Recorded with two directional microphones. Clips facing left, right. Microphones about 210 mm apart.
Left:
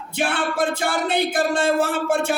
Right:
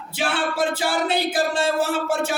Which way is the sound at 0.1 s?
55° left (ahead or behind).